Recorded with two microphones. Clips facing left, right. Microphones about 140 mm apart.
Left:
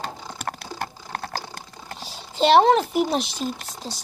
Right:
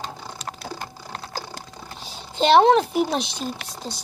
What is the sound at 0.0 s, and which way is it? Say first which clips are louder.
Typing: left 2 dB; 55° left (ahead or behind).